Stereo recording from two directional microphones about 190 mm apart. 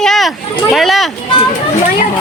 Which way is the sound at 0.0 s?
Centre (ahead or behind).